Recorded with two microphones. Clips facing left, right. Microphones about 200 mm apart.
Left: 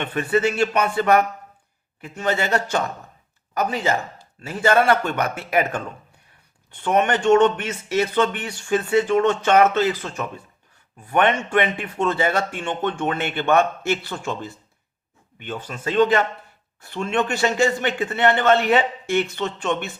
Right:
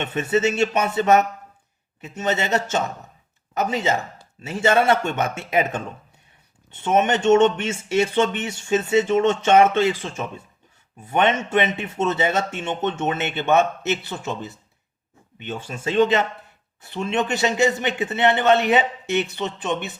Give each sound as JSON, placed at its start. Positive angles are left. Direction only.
{"t": 0.0, "sound": "speech", "side_deg": -25}